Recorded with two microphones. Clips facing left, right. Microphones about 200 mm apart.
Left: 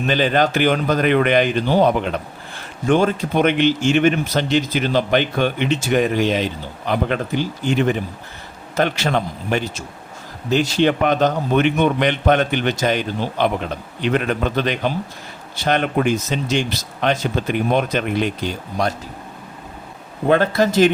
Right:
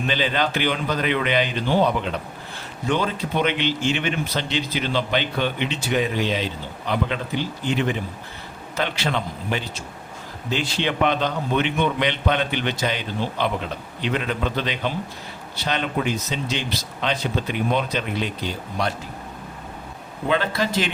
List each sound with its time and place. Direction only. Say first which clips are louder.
0.1 s speech: left 7 dB; 45° left (ahead or behind)
20.2 s speech: left 7 dB; 50° left (ahead or behind)